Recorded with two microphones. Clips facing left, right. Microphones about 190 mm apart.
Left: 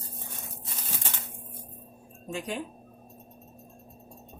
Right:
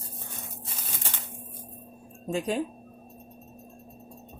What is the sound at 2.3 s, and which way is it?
Speech, 40° right (ahead or behind).